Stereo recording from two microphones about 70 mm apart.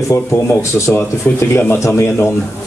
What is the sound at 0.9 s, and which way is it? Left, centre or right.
Speech, left.